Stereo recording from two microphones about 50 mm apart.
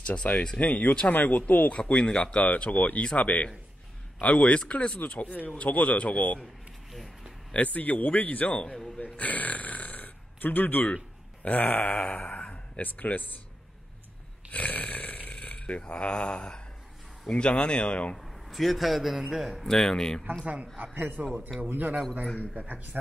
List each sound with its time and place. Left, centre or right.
0.0 s speech: left
0.6 s speech: left
1.7 s speech: left
2.5 s speech: left
6.4 s a sound: centre
7.5 s speech: left
8.9 s burping: left
11.4 s speech: left
12.8 s speech: left
14.5 s speech: left
18.1 s a man's voice: centre
20.9 s a man's voice: right